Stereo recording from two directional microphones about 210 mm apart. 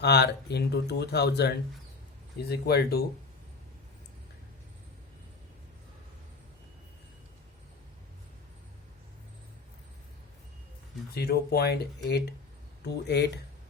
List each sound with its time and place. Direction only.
0.0 s speech: 50° left (ahead or behind)
11.1 s speech: 50° left (ahead or behind)